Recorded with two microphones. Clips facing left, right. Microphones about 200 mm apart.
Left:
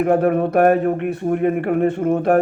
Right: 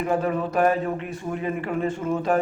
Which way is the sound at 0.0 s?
60° left (ahead or behind).